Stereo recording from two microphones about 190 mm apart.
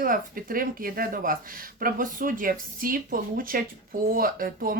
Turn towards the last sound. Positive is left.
turn(degrees=-50)  # may be behind; listen again after turning